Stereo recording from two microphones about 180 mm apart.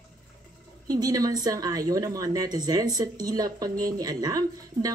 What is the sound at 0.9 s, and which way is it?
A woman's voice, 20° right (ahead or behind).